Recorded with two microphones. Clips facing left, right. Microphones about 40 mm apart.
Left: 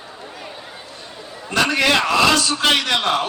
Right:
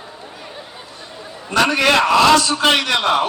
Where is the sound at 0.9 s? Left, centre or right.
Right.